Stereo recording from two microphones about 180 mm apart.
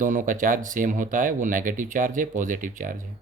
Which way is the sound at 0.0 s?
50° right (ahead or behind).